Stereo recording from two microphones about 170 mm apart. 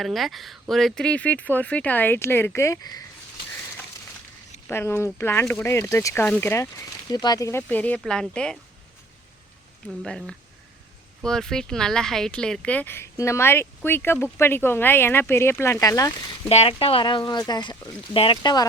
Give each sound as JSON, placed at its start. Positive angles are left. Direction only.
{"t": 0.0, "sound": "speech", "side_deg": 0}
{"t": 4.7, "sound": "speech", "side_deg": 15}
{"t": 10.0, "sound": "speech", "side_deg": 5}
{"t": 16.5, "sound": "speech", "side_deg": 35}